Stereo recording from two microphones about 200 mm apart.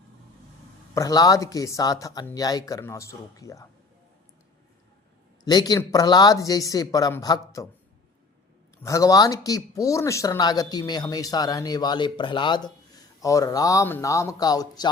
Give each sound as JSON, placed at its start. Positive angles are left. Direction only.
{"t": 0.9, "sound": "speech", "side_deg": 15}
{"t": 5.5, "sound": "speech", "side_deg": 20}
{"t": 8.8, "sound": "speech", "side_deg": 15}